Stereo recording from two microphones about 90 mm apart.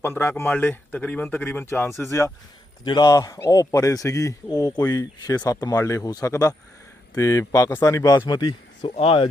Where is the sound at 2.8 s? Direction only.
55° left (ahead or behind).